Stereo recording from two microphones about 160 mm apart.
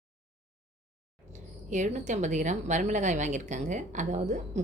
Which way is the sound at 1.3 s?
50° right (ahead or behind).